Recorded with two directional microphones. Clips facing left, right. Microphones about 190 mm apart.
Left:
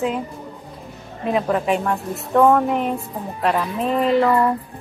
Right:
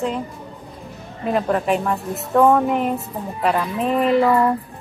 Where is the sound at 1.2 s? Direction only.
Centre (ahead or behind).